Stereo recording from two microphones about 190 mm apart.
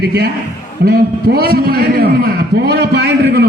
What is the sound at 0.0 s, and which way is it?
A man's voice, 60° right (ahead or behind).